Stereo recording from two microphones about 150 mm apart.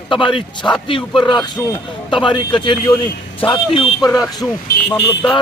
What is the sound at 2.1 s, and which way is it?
A man's voice, 30° left (ahead or behind).